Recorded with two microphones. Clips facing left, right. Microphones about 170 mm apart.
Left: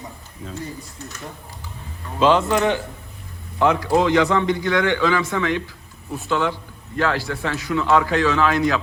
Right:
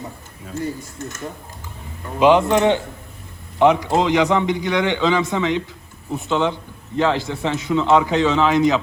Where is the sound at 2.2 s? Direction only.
20° right (ahead or behind).